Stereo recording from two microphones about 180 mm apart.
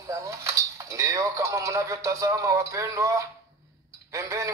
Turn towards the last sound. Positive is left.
turn(degrees=-15)  # may be behind; listen again after turning